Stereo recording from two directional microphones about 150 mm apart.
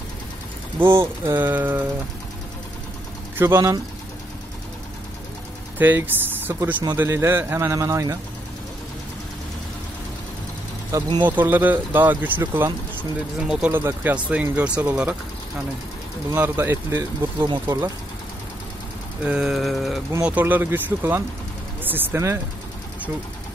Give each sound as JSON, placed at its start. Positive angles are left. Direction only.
{"t": 0.8, "sound": "speech", "side_deg": -35}
{"t": 1.2, "sound": "speech", "side_deg": -15}
{"t": 3.3, "sound": "speech", "side_deg": -15}
{"t": 5.8, "sound": "speech", "side_deg": -15}
{"t": 10.9, "sound": "speech", "side_deg": -25}
{"t": 11.2, "sound": "speech", "side_deg": -10}
{"t": 16.3, "sound": "speech", "side_deg": -15}
{"t": 17.5, "sound": "speech", "side_deg": -25}
{"t": 19.2, "sound": "a sound", "side_deg": -5}
{"t": 20.1, "sound": "speech", "side_deg": -10}